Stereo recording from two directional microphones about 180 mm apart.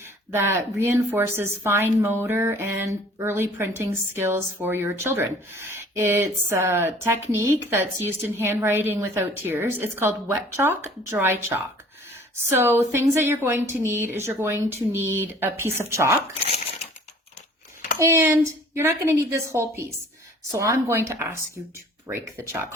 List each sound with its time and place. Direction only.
0.3 s speech: 15° right (ahead or behind)
17.9 s speech: 15° right (ahead or behind)